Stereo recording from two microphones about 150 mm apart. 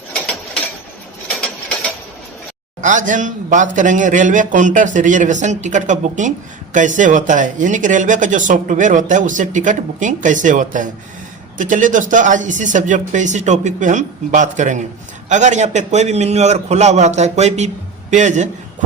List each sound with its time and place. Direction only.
2.8 s a man's voice: 55° right (ahead or behind)